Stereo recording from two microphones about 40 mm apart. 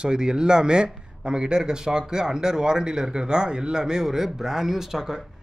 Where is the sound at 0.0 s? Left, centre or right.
Right.